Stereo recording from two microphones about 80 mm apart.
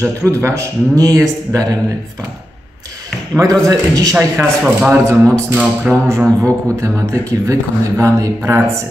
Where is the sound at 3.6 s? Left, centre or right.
Right.